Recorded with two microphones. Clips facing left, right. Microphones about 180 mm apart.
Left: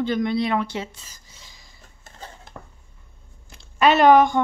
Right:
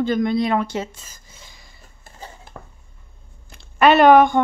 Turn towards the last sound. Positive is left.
turn(degrees=-60)  # may be behind; listen again after turning